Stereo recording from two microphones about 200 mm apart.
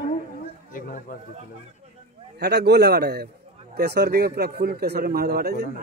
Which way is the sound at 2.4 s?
55° right (ahead or behind).